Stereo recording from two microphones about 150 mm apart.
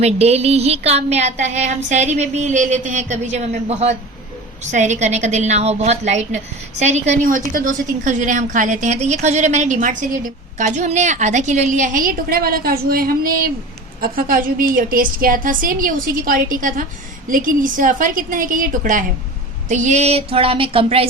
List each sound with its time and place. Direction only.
0.0 s a woman's voice: 45° right (ahead or behind)